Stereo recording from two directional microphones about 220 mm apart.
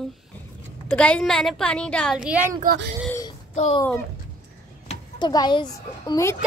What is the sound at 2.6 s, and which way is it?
Speech, 45° right (ahead or behind).